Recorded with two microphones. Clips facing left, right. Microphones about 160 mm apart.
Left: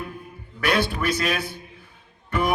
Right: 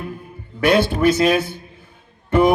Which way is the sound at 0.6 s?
45° right (ahead or behind).